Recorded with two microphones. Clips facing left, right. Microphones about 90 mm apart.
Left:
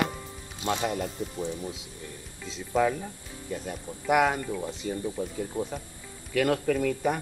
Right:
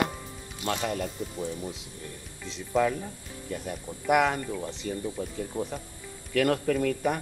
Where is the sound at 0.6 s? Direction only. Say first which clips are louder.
Left 2 dB; 20° left (ahead or behind).